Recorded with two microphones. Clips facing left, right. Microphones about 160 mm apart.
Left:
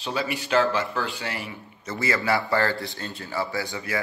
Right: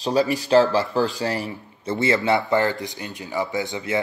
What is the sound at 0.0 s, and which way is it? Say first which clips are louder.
Speech: right 8 dB; 40° right (ahead or behind).